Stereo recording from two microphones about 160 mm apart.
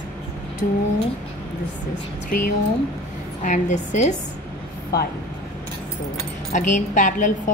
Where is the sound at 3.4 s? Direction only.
50° left (ahead or behind).